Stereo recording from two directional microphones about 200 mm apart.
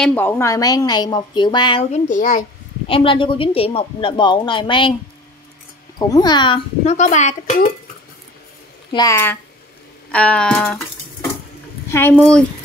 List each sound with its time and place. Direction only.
0.0 s a woman's voice: 10° left (ahead or behind); by 2.4 s 40° left (ahead or behind)
2.9 s a woman's voice: 25° left (ahead or behind)
5.9 s speech: 20° left (ahead or behind); by 7.7 s 40° left (ahead or behind)
8.9 s speech: 15° left (ahead or behind)
10.1 s music: 5° left (ahead or behind)
11.9 s speech: 10° left (ahead or behind)